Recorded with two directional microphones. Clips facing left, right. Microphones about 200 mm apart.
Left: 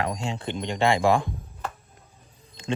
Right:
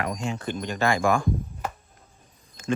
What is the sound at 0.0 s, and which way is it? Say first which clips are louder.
Speech: even; 30° left (ahead or behind).